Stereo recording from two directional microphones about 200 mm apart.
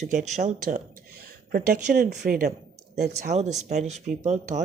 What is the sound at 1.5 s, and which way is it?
A woman's voice, 50° right (ahead or behind).